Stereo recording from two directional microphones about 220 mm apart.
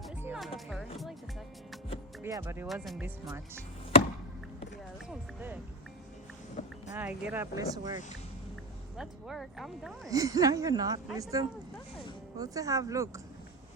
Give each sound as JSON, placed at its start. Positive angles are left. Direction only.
{"t": 0.2, "sound": "music", "side_deg": -5}
{"t": 2.2, "sound": "speech", "side_deg": -15}
{"t": 2.6, "sound": "speech", "side_deg": 0}
{"t": 5.0, "sound": "speech", "side_deg": -10}
{"t": 6.6, "sound": "boat", "side_deg": 30}
{"t": 6.9, "sound": "speech", "side_deg": -5}
{"t": 9.0, "sound": "speech", "side_deg": 0}
{"t": 10.1, "sound": "speech", "side_deg": -15}